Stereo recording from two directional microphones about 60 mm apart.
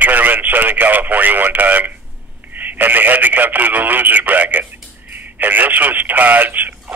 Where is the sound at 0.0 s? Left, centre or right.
Right.